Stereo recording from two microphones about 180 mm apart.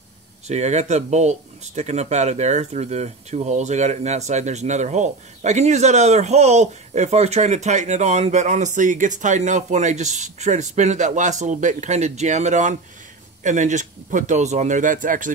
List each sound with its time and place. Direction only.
0.5 s speech: 40° right (ahead or behind)